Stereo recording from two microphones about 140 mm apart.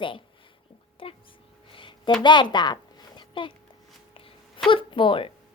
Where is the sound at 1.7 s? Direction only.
35° left (ahead or behind).